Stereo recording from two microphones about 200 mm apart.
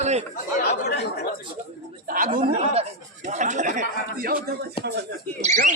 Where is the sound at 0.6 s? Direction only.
55° left (ahead or behind).